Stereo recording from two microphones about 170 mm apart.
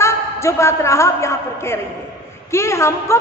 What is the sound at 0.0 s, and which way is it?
A man's voice, 15° left (ahead or behind).